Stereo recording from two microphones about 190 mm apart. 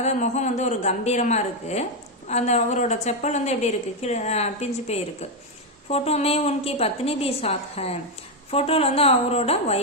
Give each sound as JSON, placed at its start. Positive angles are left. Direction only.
{"t": 0.0, "sound": "a woman's voice", "side_deg": 40}